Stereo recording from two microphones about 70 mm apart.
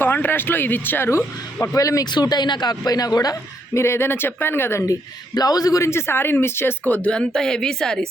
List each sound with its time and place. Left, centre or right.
0.0 s speech: left
1.7 s a man's voice: left
2.0 s speech: left
3.8 s speech: left
5.3 s a man's voice: left
5.8 s speech: left
7.1 s speech: centre